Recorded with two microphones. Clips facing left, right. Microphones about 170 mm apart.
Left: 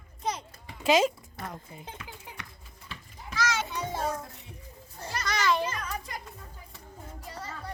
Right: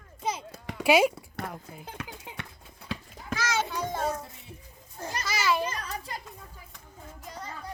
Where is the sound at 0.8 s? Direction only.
10° right (ahead or behind).